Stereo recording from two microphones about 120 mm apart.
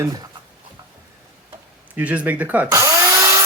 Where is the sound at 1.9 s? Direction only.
10° right (ahead or behind).